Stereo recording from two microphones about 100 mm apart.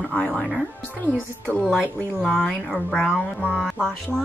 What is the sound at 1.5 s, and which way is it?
A woman's voice, 15° left (ahead or behind).